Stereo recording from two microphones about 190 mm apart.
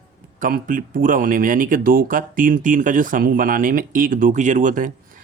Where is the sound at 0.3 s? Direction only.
45° right (ahead or behind).